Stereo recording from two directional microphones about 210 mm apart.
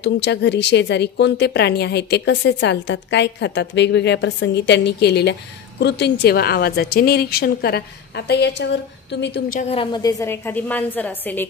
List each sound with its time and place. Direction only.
0.0 s a woman's voice: 55° left (ahead or behind)
9.6 s a woman's voice: 25° left (ahead or behind); by 11.4 s 10° left (ahead or behind)